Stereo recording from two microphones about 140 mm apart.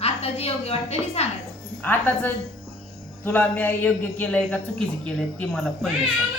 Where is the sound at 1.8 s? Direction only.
15° left (ahead or behind).